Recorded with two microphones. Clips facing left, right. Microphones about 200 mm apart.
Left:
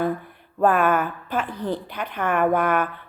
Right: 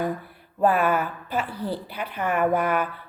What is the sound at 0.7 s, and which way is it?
Speech, 50° left (ahead or behind).